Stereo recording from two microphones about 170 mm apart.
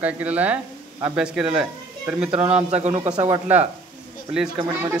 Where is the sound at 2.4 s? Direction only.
40° right (ahead or behind).